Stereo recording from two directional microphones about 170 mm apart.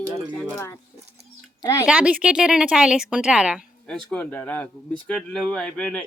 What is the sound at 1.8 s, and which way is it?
Speech, 5° right (ahead or behind).